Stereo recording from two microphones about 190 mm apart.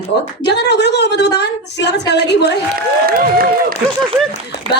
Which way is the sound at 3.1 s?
50° right (ahead or behind).